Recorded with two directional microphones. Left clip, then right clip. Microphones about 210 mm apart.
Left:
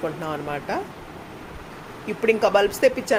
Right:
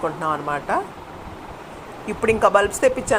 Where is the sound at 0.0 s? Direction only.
5° left (ahead or behind).